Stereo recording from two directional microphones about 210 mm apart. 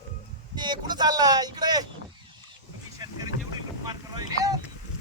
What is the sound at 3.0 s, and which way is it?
Boat, 20° right (ahead or behind).